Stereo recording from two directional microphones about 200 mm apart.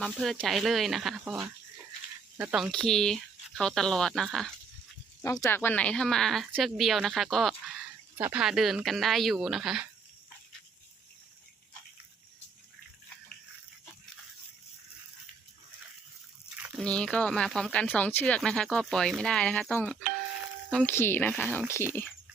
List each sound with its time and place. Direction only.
0.0 s speech: centre (ahead or behind)
2.4 s speech: 5° right (ahead or behind)
5.2 s speech: 15° left (ahead or behind); by 9.8 s centre (ahead or behind)
16.8 s speech: 5° left (ahead or behind)